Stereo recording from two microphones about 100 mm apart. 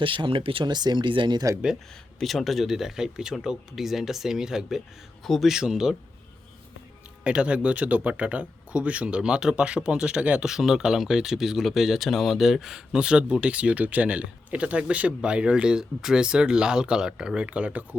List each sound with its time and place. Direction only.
0.0 s speech: 60° right (ahead or behind)
2.1 s speech: centre (ahead or behind)
7.3 s speech: 10° right (ahead or behind)